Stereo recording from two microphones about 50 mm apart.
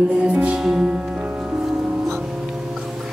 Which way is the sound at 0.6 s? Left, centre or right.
Centre.